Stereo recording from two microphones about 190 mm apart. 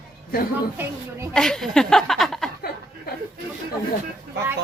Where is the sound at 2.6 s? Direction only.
55° left (ahead or behind).